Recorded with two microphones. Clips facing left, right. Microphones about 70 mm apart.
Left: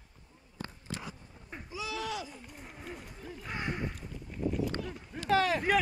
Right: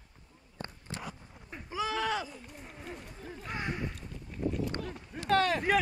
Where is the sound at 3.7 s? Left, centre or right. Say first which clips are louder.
Left 2 dB; centre.